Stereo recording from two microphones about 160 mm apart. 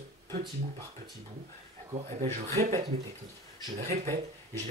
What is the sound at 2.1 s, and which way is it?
Speech, 50° right (ahead or behind).